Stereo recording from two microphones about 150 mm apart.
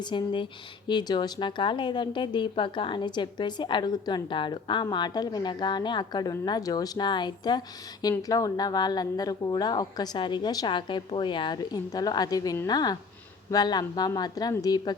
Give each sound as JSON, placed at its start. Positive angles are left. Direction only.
{"t": 0.0, "sound": "a woman's voice", "side_deg": 30}